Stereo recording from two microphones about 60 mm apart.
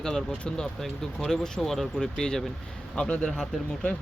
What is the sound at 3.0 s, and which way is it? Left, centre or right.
Speech, centre.